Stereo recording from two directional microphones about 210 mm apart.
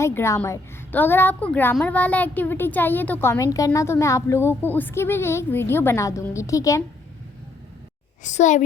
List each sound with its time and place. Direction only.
0.0 s a woman's voice: 10° left (ahead or behind)
8.2 s a child's voice: 35° left (ahead or behind)